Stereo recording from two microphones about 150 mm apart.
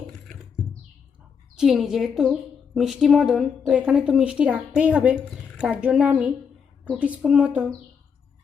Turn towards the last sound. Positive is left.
turn(degrees=-10)  # may be behind; listen again after turning